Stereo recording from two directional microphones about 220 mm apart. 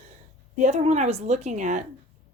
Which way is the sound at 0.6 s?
30° right (ahead or behind).